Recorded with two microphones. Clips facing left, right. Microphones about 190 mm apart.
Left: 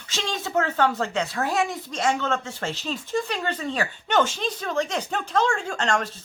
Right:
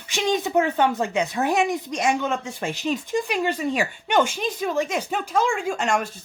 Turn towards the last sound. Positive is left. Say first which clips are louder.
# right 2 dB
turn(degrees=-10)  # may be behind; listen again after turning